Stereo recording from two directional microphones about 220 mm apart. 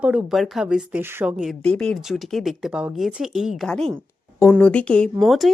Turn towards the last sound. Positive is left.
turn(degrees=0)  # may be behind; listen again after turning